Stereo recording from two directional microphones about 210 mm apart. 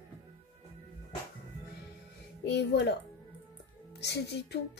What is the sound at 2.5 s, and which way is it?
Speech, 55° left (ahead or behind).